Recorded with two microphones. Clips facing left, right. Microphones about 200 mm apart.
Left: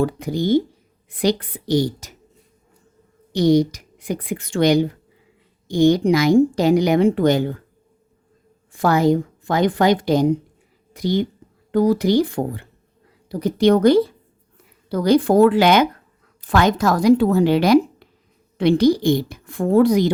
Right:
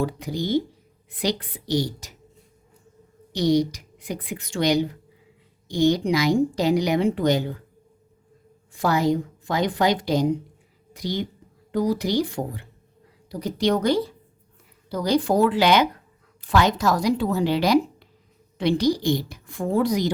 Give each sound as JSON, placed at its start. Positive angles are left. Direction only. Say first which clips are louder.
{"t": 0.0, "sound": "a woman's voice", "louder": "left 6 dB", "side_deg": 50}
{"t": 3.3, "sound": "a woman's voice", "louder": "left 5 dB", "side_deg": 50}
{"t": 8.7, "sound": "a woman's voice", "louder": "left 5 dB", "side_deg": 55}